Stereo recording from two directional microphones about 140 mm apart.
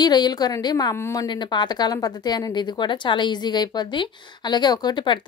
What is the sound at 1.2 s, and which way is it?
Speech, 30° left (ahead or behind).